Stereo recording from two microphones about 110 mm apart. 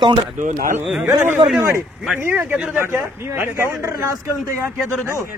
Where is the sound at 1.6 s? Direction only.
25° right (ahead or behind).